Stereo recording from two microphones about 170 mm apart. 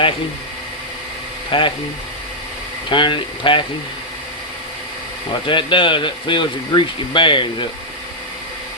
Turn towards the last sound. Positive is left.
turn(degrees=30)  # may be behind; listen again after turning